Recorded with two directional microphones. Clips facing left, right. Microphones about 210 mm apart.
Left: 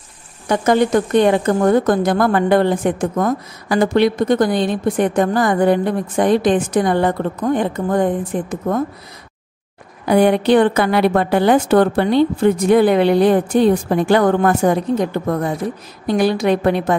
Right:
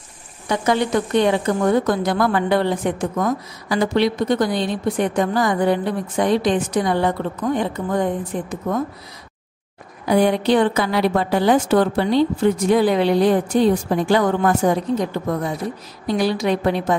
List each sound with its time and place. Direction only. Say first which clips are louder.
0.5 s a woman's voice: left 4 dB; 50° left (ahead or behind)
10.0 s a woman's voice: left 3 dB; 60° left (ahead or behind)